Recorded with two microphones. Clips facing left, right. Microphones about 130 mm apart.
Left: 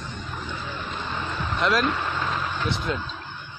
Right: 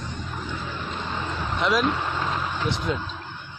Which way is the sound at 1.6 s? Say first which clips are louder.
Even; 15° right (ahead or behind).